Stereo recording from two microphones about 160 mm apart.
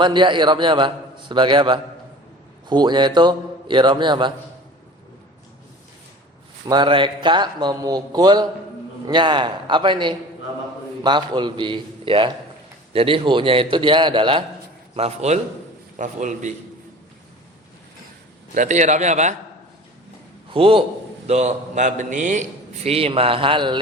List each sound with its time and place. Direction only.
0.0 s a man's voice: 30° right (ahead or behind)
6.7 s a man's voice: 30° right (ahead or behind)
14.9 s a man's voice: 40° right (ahead or behind)
18.5 s a man's voice: 50° right (ahead or behind)
20.5 s a man's voice: 35° right (ahead or behind)